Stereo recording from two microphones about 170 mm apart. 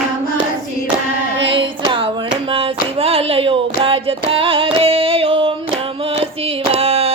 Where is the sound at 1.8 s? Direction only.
30° right (ahead or behind).